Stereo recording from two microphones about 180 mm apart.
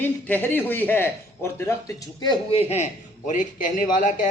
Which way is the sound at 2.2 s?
30° left (ahead or behind).